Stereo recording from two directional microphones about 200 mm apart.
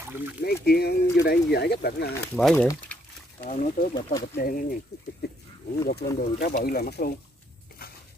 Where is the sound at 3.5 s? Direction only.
35° left (ahead or behind).